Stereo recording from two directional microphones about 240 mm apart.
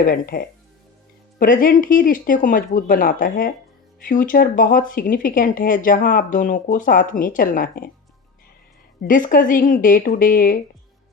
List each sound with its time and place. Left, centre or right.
0.0 s speech: left
9.0 s speech: left